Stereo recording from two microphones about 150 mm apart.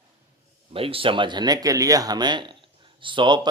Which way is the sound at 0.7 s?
40° right (ahead or behind).